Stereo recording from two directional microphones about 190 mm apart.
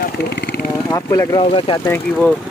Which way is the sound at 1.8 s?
10° left (ahead or behind).